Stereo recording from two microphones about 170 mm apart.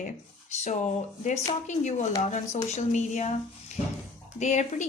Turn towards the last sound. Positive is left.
turn(degrees=45)  # may be behind; listen again after turning